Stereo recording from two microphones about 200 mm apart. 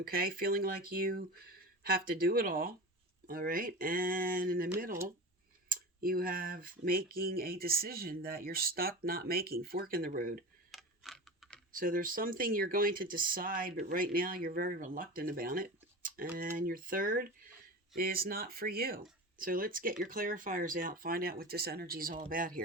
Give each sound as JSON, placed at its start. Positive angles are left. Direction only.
{"t": 0.0, "sound": "speech", "side_deg": -45}
{"t": 10.7, "sound": "computer keyboard", "side_deg": 0}
{"t": 11.7, "sound": "speech", "side_deg": -45}